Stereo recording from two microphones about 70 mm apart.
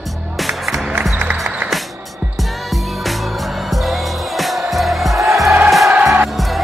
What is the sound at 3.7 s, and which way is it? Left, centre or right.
Music, centre.